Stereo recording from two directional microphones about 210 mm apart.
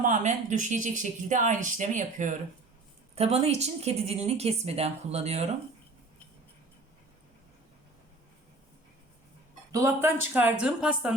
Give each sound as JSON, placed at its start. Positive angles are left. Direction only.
{"t": 0.0, "sound": "a woman's voice", "side_deg": -35}
{"t": 9.7, "sound": "speech", "side_deg": -10}